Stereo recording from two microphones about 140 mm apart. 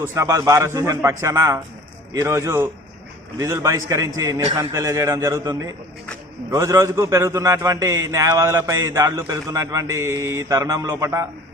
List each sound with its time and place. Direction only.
0.0 s a man's voice: 20° right (ahead or behind)